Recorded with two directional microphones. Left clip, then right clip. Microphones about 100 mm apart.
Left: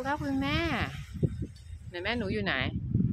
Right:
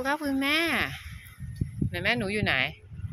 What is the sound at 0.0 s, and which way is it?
A woman's voice, 30° right (ahead or behind).